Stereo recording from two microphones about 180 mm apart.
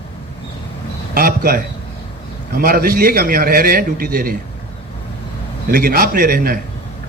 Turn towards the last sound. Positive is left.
turn(degrees=-55)  # may be behind; listen again after turning